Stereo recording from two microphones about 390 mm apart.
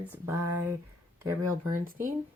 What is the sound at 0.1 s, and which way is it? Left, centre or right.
Speech, centre.